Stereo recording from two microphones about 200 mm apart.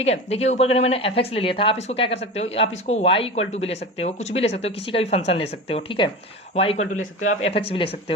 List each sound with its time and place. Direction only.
0.0 s speech: 30° left (ahead or behind)